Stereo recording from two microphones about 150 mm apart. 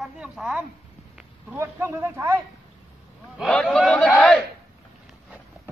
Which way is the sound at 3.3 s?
Centre (ahead or behind).